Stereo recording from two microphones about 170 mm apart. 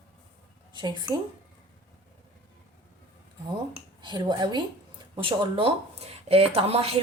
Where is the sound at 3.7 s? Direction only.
25° right (ahead or behind).